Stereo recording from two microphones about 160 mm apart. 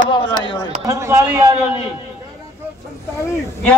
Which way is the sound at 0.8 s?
20° right (ahead or behind).